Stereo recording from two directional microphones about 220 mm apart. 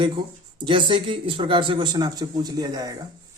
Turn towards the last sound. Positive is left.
turn(degrees=-20)  # may be behind; listen again after turning